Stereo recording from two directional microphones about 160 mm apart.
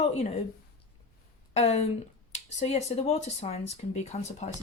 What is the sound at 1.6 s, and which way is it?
Speech, 45° left (ahead or behind).